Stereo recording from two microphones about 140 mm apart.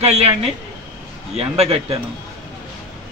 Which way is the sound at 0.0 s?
50° right (ahead or behind).